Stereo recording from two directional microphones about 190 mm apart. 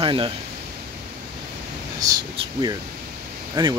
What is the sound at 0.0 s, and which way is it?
Speech, 25° right (ahead or behind).